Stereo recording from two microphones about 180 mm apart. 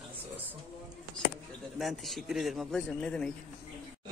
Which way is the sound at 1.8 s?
Centre (ahead or behind).